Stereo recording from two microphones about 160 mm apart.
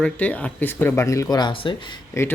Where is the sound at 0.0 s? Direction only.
10° left (ahead or behind); by 1.7 s 25° left (ahead or behind).